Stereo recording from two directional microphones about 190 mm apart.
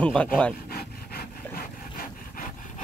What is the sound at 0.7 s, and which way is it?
Wood, 50° left (ahead or behind).